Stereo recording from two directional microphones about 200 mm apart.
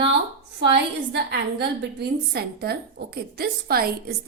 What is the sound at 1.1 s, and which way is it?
A woman's voice, 60° right (ahead or behind).